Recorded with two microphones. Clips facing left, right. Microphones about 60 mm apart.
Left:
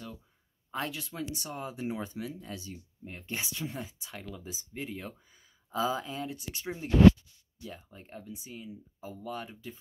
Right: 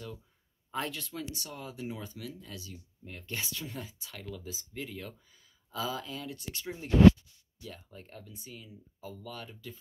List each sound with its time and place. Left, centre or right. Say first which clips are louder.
0.7 s speech: even; centre
1.3 s speech: left 4 dB; left